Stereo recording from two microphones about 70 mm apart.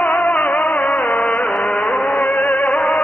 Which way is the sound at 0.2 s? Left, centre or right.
Centre.